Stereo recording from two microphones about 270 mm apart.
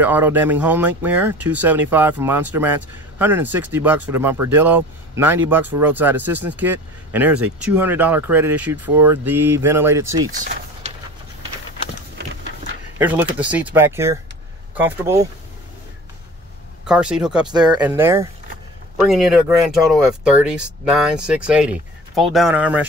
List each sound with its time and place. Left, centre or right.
0.0 s speech: centre
10.3 s vehicle: right
13.0 s speech: centre
16.8 s speech: centre